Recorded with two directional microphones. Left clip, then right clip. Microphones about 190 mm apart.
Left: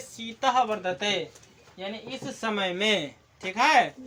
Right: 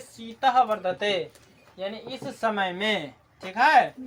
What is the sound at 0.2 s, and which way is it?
Speech, 10° right (ahead or behind).